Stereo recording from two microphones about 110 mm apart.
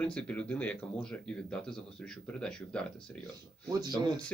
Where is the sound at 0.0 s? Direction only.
10° left (ahead or behind).